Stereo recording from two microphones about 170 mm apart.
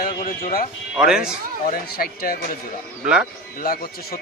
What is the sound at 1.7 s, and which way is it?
Speech, 60° left (ahead or behind).